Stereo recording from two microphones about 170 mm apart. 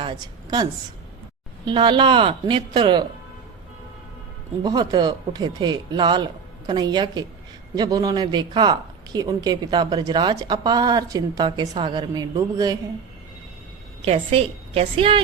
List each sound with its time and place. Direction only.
0.0 s a woman's voice: 25° right (ahead or behind)
4.6 s speech: 25° right (ahead or behind)
14.0 s a woman's voice: 35° right (ahead or behind)